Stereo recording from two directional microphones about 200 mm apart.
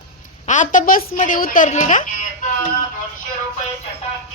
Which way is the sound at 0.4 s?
40° left (ahead or behind).